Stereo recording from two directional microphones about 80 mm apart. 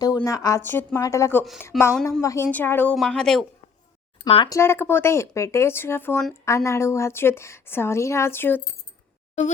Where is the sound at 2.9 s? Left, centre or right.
Centre.